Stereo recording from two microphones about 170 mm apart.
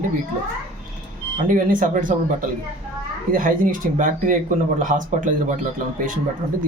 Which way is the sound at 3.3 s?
55° right (ahead or behind).